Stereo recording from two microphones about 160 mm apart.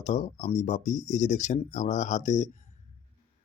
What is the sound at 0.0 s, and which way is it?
Speech, 45° left (ahead or behind).